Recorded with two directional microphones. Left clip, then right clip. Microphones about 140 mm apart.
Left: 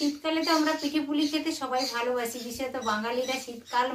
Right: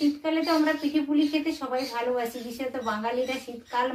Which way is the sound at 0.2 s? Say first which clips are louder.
Right 1 dB; centre (ahead or behind).